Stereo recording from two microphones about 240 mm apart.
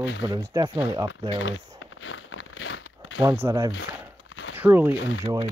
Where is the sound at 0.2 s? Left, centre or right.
Centre.